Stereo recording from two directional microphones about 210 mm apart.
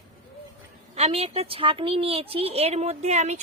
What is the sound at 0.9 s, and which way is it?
Speech, 30° right (ahead or behind).